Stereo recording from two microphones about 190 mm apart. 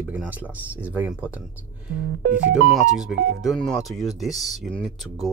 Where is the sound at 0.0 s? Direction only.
10° right (ahead or behind).